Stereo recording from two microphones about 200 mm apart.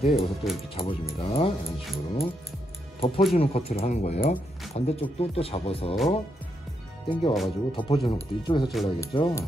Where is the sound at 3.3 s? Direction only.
30° left (ahead or behind).